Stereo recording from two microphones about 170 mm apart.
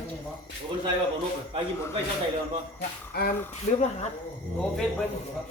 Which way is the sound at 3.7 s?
45° left (ahead or behind).